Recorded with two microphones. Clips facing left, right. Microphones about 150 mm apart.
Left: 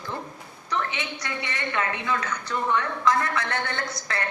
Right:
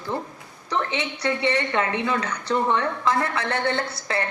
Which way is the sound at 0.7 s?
30° right (ahead or behind).